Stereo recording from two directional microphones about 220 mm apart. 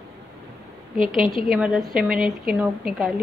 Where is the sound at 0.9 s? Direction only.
40° right (ahead or behind).